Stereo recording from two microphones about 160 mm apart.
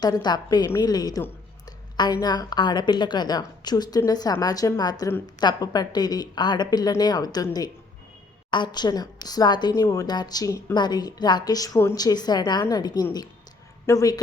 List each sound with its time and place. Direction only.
0.0 s a woman's voice: 25° left (ahead or behind)
2.2 s a woman's voice: 25° left (ahead or behind)